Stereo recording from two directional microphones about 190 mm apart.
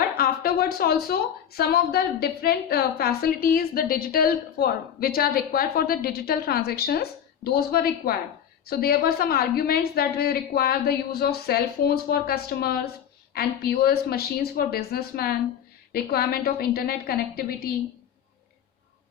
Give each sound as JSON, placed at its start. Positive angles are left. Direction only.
{"t": 0.2, "sound": "a woman's voice", "side_deg": 50}